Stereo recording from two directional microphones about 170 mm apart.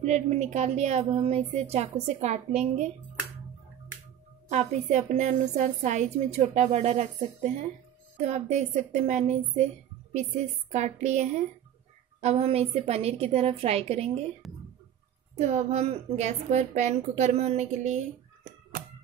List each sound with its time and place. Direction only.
0.0 s a woman's voice: 40° right (ahead or behind)
4.5 s a woman's voice: 40° right (ahead or behind)
10.7 s a woman's voice: 45° right (ahead or behind)
14.4 s whispering: centre (ahead or behind)
15.3 s a woman's voice: 45° right (ahead or behind)